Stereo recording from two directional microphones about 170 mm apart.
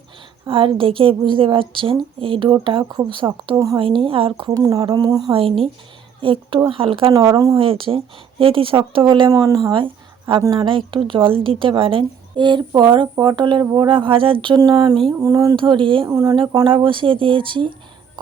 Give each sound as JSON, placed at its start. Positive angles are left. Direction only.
{"t": 0.4, "sound": "a woman's voice", "side_deg": -30}
{"t": 7.1, "sound": "a woman's voice", "side_deg": -20}